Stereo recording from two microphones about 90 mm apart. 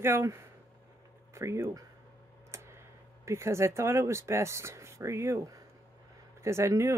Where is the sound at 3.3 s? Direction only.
30° right (ahead or behind).